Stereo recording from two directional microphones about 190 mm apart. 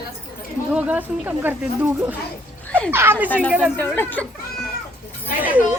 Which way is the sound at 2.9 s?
10° right (ahead or behind).